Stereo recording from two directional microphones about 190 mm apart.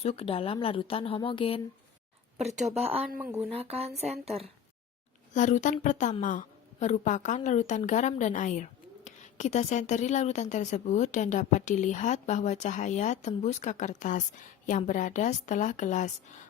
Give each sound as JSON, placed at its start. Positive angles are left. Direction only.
{"t": 0.0, "sound": "speech", "side_deg": 30}
{"t": 2.6, "sound": "a woman's voice", "side_deg": 0}
{"t": 3.6, "sound": "speech", "side_deg": -30}
{"t": 5.3, "sound": "a woman's voice", "side_deg": 40}